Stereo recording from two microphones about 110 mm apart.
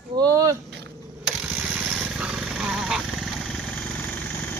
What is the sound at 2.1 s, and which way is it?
Vehicle, 5° right (ahead or behind).